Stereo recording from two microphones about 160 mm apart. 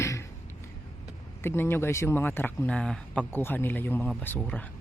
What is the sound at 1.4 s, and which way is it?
Speech, 15° left (ahead or behind).